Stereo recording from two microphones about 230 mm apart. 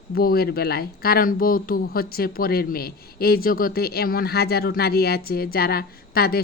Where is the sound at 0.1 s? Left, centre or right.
Left.